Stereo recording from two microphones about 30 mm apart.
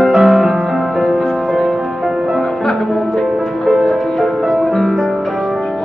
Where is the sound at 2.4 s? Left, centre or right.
Centre.